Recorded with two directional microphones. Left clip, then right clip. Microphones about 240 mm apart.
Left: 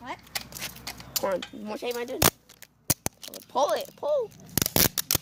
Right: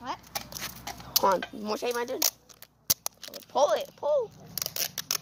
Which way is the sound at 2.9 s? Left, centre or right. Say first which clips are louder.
Even; left.